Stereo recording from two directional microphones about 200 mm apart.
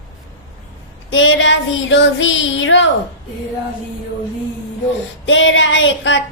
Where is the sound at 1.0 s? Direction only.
70° left (ahead or behind).